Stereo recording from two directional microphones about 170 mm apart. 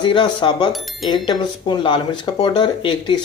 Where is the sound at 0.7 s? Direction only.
Centre (ahead or behind).